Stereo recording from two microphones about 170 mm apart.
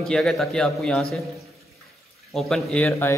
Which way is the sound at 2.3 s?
Centre (ahead or behind).